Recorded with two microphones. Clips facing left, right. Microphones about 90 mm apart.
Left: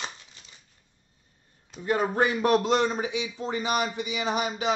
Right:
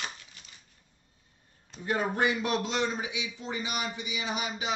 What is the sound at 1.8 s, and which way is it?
A man's voice, 40° left (ahead or behind).